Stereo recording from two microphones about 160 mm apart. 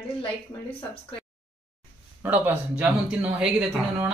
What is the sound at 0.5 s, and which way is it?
Speech, 20° left (ahead or behind).